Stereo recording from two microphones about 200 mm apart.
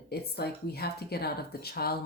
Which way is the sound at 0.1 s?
50° left (ahead or behind).